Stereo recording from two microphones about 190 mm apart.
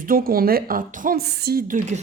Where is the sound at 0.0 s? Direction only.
50° right (ahead or behind).